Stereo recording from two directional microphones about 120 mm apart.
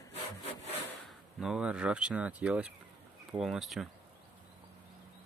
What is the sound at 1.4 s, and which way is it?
Speech, 5° right (ahead or behind).